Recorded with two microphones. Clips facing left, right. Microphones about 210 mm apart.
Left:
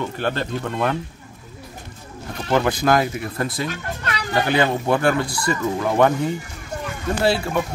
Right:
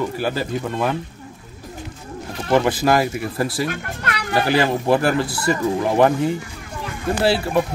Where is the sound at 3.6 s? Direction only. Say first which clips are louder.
Right 2 dB; 55° right (ahead or behind).